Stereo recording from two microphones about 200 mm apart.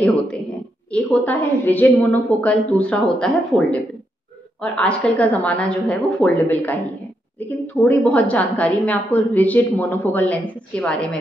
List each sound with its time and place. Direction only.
0.9 s a woman's voice: 10° left (ahead or behind)